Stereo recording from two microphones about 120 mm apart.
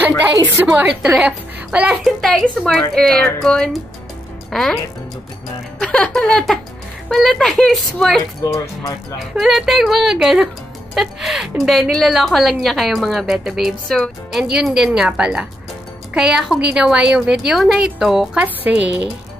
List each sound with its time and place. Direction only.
0.7 s a woman's voice: 15° right (ahead or behind)
2.2 s a woman's voice: 5° left (ahead or behind)
5.8 s a woman's voice: 5° left (ahead or behind)
8.5 s speech: 30° left (ahead or behind)
9.3 s a woman's voice: centre (ahead or behind)
14.5 s a woman's voice: 5° right (ahead or behind)